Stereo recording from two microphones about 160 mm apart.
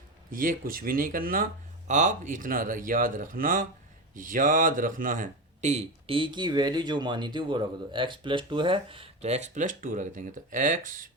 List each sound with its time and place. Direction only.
0.3 s speech: 60° right (ahead or behind)
1.9 s speech: 50° right (ahead or behind)